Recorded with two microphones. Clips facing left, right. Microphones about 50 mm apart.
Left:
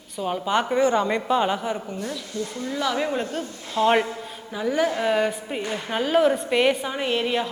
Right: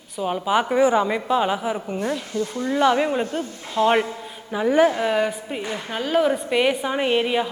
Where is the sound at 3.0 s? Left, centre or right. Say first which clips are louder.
Right 3 dB; centre.